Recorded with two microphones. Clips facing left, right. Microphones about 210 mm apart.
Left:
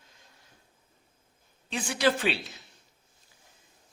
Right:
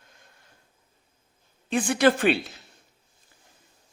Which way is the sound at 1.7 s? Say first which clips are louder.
Right 6 dB; 55° right (ahead or behind).